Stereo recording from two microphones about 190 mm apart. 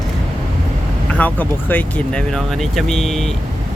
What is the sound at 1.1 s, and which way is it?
Speech, 10° left (ahead or behind).